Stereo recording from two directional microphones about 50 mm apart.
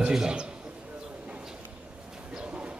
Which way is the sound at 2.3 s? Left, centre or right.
Centre.